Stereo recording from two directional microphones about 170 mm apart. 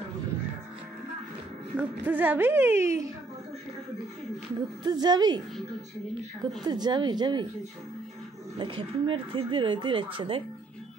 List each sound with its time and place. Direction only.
1.8 s a woman's voice: 10° right (ahead or behind)
4.8 s speech: 25° right (ahead or behind)
6.6 s speech: 25° right (ahead or behind)
8.5 s speech: 30° right (ahead or behind)